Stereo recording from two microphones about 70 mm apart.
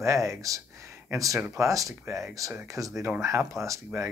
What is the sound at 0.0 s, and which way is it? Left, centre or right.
Speech, right.